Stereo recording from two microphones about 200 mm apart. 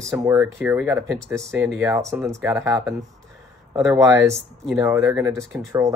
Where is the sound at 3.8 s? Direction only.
15° right (ahead or behind).